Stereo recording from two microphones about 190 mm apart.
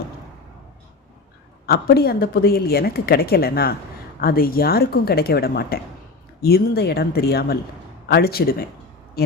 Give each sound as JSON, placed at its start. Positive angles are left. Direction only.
{"t": 1.6, "sound": "a woman's voice", "side_deg": 55}